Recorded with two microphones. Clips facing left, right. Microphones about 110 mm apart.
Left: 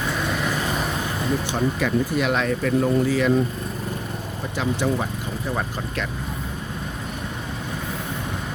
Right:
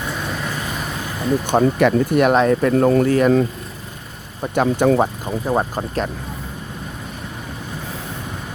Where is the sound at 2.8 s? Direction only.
65° right (ahead or behind).